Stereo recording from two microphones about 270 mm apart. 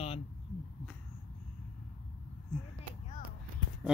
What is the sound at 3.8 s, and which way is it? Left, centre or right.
Speech, centre.